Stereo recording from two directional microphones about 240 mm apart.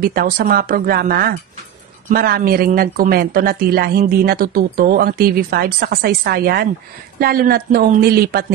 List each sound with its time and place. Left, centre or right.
0.0 s speech: right